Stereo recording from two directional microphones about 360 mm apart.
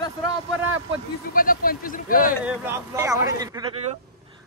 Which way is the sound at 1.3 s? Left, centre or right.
Left.